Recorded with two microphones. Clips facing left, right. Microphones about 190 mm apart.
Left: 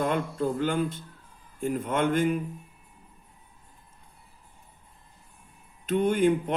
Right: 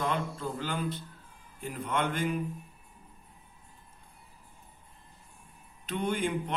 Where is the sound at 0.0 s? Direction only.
50° left (ahead or behind).